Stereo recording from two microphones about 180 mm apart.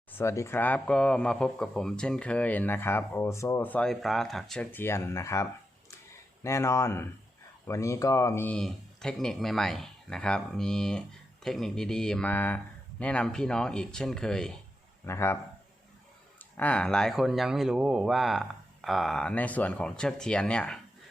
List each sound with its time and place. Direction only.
0.1 s speech: 15° left (ahead or behind)
15.0 s speech: 15° left (ahead or behind)
16.6 s speech: 5° left (ahead or behind)